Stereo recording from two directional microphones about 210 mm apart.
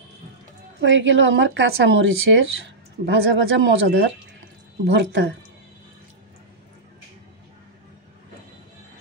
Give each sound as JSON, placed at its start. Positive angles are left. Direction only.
{"t": 0.7, "sound": "speech", "side_deg": -60}